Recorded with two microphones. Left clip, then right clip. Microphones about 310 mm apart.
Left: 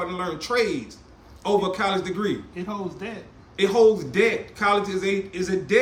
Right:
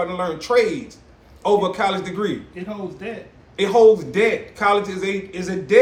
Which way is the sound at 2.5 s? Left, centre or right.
Centre.